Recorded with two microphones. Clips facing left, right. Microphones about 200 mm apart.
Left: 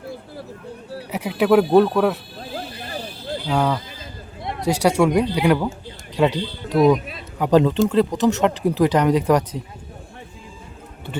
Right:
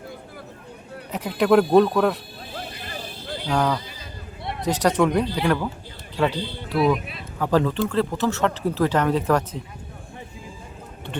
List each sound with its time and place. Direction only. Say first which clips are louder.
1.1 s speech: left 1 dB; 10° left (ahead or behind)
2.8 s a sound: left 4 dB; 35° left (ahead or behind)
3.5 s speech: left 1 dB; 5° left (ahead or behind)
6.7 s speech: left 5 dB; 40° left (ahead or behind)
7.3 s speech: left 5 dB; 20° left (ahead or behind)